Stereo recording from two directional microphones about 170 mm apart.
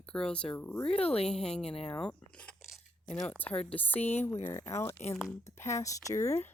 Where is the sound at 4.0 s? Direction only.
40° left (ahead or behind).